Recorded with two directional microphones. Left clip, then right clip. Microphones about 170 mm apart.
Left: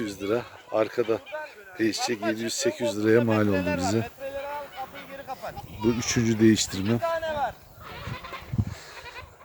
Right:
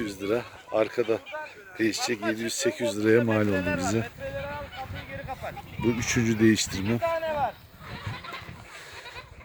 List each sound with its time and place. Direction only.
0.0 s speech: centre (ahead or behind)
3.5 s speech: 50° right (ahead or behind)
4.0 s a sound: 50° right (ahead or behind)
6.0 s speech: 5° left (ahead or behind)
7.0 s a sound: 35° right (ahead or behind)
8.0 s neigh: 55° right (ahead or behind)